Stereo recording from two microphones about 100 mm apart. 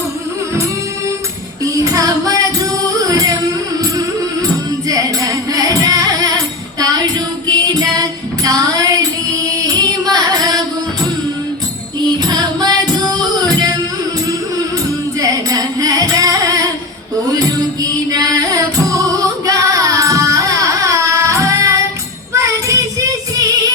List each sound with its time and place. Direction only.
1.6 s music: 35° right (ahead or behind)
4.9 s music: 35° right (ahead or behind)
9.6 s carnatic music: 40° right (ahead or behind)
12.2 s music: 45° right (ahead or behind)
15.2 s music: 40° right (ahead or behind)
22.3 s child singing: 30° right (ahead or behind)